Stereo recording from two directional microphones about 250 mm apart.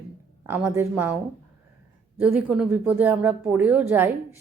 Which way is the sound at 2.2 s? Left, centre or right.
Centre.